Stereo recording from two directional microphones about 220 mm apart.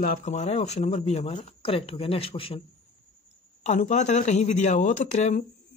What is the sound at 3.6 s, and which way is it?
Speech, 30° left (ahead or behind).